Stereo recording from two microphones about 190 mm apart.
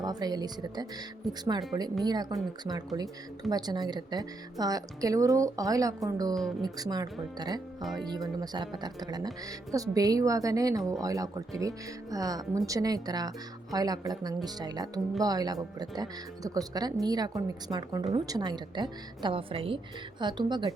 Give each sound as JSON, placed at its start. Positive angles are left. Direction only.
{"t": 0.0, "sound": "speech", "side_deg": -20}